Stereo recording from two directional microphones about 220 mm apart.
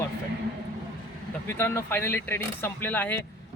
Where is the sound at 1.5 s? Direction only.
10° left (ahead or behind).